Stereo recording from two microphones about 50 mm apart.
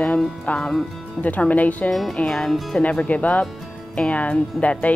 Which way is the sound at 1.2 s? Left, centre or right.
Left.